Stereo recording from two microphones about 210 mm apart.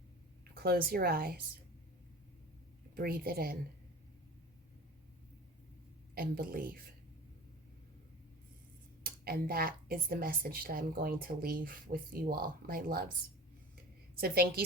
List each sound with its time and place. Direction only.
0.5 s speech: 45° right (ahead or behind)
2.9 s speech: 45° right (ahead or behind)
6.1 s speech: 45° right (ahead or behind)
9.0 s speech: 45° right (ahead or behind)
14.2 s speech: 45° right (ahead or behind)